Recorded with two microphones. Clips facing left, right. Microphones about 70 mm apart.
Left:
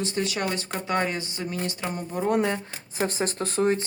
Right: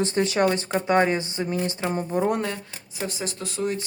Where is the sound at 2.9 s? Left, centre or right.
Left.